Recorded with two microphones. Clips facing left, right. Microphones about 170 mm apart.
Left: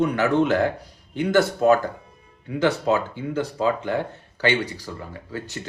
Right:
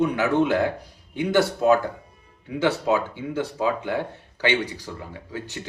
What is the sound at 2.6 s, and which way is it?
Speech, 10° right (ahead or behind).